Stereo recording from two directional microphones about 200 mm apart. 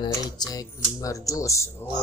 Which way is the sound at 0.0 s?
20° left (ahead or behind).